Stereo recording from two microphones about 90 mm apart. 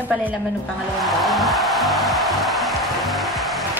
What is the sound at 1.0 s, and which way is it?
Music, centre (ahead or behind).